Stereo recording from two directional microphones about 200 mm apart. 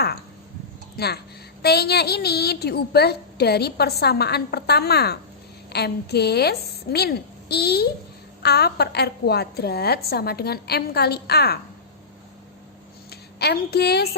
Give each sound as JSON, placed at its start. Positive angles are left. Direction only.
{"t": 0.9, "sound": "a woman's voice", "side_deg": 55}
{"t": 13.1, "sound": "a woman's voice", "side_deg": 55}